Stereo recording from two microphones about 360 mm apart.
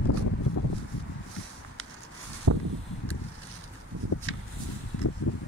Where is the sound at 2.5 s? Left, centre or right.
Right.